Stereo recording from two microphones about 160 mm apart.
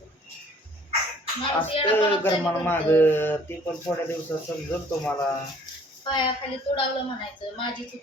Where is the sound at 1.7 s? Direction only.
35° left (ahead or behind).